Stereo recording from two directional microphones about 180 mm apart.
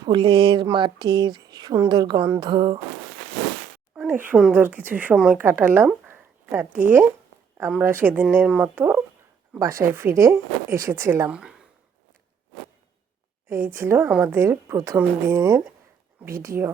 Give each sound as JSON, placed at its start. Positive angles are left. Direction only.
{"t": 0.0, "sound": "speech", "side_deg": -25}
{"t": 3.9, "sound": "speech", "side_deg": -10}
{"t": 6.1, "sound": "a sound", "side_deg": -10}
{"t": 7.7, "sound": "speech", "side_deg": -10}
{"t": 13.7, "sound": "speech", "side_deg": -10}